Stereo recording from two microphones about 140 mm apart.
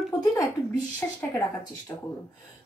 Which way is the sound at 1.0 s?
10° left (ahead or behind).